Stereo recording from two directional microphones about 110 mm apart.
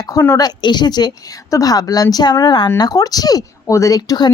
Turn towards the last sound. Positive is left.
turn(degrees=35)  # may be behind; listen again after turning